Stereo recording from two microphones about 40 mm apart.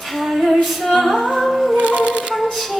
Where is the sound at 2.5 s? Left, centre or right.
Centre.